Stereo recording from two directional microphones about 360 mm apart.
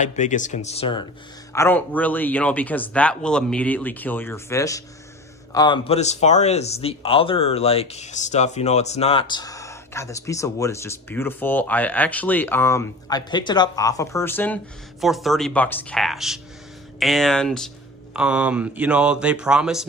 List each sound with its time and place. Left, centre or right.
0.0 s speech: centre